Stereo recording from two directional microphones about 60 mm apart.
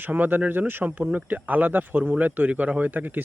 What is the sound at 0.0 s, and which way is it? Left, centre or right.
Speech, right.